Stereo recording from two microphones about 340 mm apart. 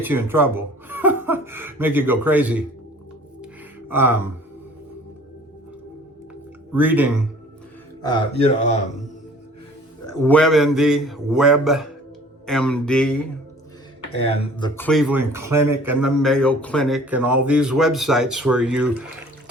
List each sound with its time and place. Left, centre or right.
0.0 s speech: centre
3.4 s music: centre
6.7 s a man's voice: centre
8.4 s speech: centre
10.2 s a man's voice: centre
14.6 s a man's voice: centre